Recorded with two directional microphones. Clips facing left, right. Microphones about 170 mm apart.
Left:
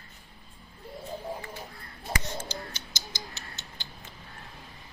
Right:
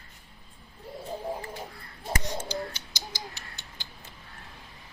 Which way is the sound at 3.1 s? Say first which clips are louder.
Right 1 dB; 20° left (ahead or behind).